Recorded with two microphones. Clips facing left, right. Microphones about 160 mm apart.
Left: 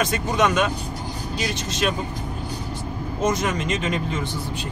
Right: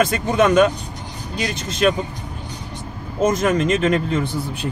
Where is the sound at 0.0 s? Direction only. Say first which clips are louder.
Right 4 dB; 50° right (ahead or behind).